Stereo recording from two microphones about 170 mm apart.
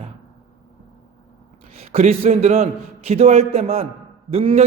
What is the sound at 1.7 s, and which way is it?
A man's voice, 40° right (ahead or behind).